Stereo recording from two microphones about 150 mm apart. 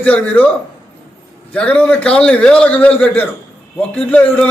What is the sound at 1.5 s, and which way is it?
A man's voice, 10° left (ahead or behind).